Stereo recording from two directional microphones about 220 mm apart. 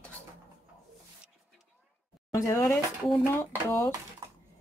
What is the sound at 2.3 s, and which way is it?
Speech, 10° left (ahead or behind).